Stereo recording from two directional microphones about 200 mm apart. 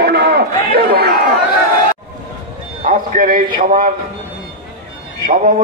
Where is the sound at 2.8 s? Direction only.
40° right (ahead or behind).